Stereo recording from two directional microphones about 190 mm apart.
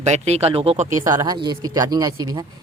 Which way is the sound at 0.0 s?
35° right (ahead or behind).